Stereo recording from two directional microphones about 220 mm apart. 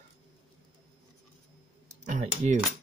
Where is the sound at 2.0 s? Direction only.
35° right (ahead or behind).